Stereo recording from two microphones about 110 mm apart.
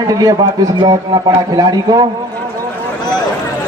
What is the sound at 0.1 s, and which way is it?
A man's voice, 35° right (ahead or behind).